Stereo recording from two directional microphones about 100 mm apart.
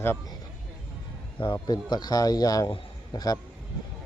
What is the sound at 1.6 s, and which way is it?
A man's voice, 45° left (ahead or behind).